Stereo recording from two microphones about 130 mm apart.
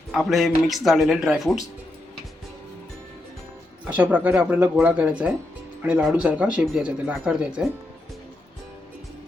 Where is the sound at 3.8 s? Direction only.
15° right (ahead or behind).